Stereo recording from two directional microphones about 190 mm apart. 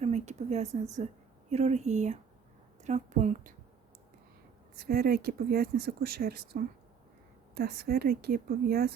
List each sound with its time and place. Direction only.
0.0 s speech: 35° right (ahead or behind)
4.8 s speech: 50° right (ahead or behind)